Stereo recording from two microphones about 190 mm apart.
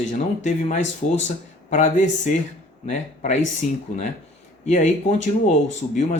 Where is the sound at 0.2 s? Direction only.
40° left (ahead or behind).